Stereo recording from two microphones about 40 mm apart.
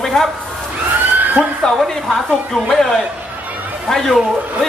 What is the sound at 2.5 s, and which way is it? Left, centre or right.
Speech, centre.